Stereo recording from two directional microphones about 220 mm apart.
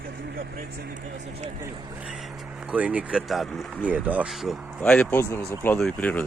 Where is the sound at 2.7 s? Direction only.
5° right (ahead or behind).